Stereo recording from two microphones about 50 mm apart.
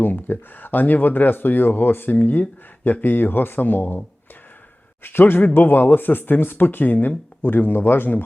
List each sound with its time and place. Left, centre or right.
0.0 s speech: left
5.0 s speech: left